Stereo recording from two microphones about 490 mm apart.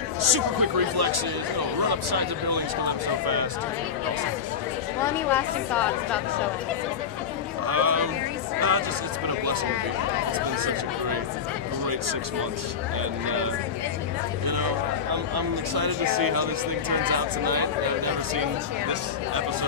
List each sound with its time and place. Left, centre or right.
0.2 s speech: right
5.0 s speech: centre
7.6 s speech: right
14.4 s speech: right